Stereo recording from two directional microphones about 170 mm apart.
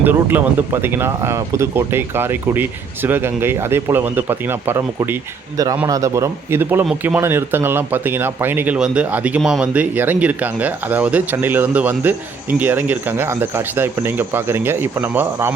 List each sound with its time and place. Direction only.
0.0 s speech: 10° right (ahead or behind)